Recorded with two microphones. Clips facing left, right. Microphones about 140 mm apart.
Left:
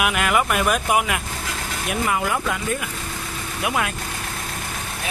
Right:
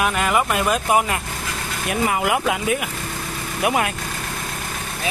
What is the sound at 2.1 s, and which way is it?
Speech, 65° right (ahead or behind).